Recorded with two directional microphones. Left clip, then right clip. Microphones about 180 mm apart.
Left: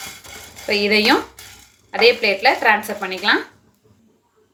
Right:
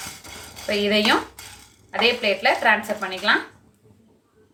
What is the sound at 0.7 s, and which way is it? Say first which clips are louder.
A woman's voice: left 4 dB; 35° left (ahead or behind).